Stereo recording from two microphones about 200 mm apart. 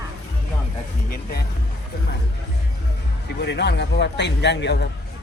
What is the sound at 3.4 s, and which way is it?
Speech, 55° left (ahead or behind).